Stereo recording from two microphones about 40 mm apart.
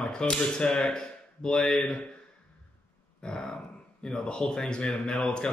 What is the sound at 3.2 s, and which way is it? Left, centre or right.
Grunt, centre.